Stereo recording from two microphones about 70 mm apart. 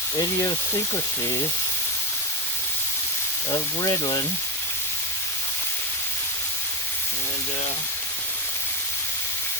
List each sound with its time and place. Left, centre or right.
0.2 s speech: left
3.5 s speech: left